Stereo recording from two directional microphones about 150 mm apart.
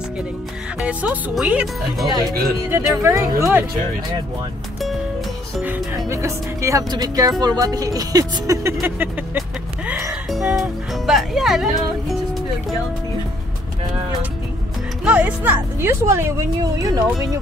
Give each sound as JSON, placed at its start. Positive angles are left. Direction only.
{"t": 0.7, "sound": "speech", "side_deg": -5}
{"t": 2.7, "sound": "speech", "side_deg": -20}
{"t": 5.6, "sound": "speech", "side_deg": -15}
{"t": 9.8, "sound": "music", "side_deg": -15}
{"t": 10.3, "sound": "music", "side_deg": 0}
{"t": 15.0, "sound": "speech", "side_deg": -10}